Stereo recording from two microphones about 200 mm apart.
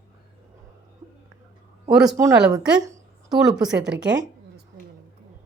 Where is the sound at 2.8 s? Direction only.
15° right (ahead or behind).